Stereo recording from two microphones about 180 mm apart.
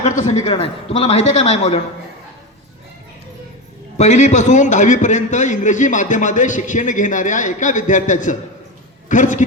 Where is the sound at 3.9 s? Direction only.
40° left (ahead or behind).